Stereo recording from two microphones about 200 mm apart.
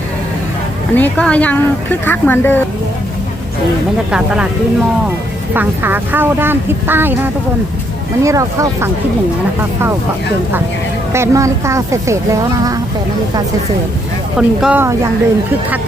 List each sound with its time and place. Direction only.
0.9 s speech: 5° left (ahead or behind)
5.5 s speech: 10° right (ahead or behind)
11.1 s speech: 15° right (ahead or behind)
14.3 s speech: 5° right (ahead or behind)